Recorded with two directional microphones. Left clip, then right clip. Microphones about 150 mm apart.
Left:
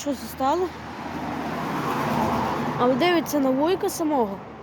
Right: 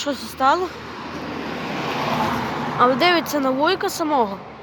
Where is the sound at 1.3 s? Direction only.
90° left.